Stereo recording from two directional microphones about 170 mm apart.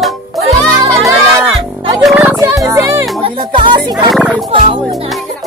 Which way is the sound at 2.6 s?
20° right (ahead or behind).